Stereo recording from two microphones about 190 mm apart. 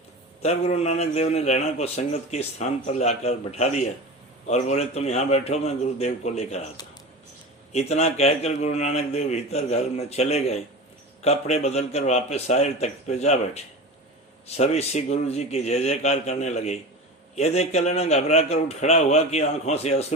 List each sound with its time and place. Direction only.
0.4 s a man's voice: 35° left (ahead or behind)
7.7 s a man's voice: 35° left (ahead or behind)